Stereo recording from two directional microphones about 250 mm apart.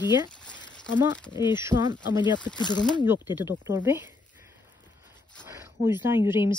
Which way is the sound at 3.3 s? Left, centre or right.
Centre.